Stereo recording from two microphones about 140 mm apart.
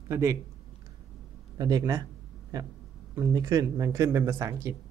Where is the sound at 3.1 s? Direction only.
20° right (ahead or behind).